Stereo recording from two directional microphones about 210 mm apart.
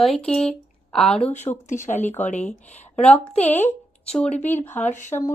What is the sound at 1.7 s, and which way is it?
Speech, 35° left (ahead or behind).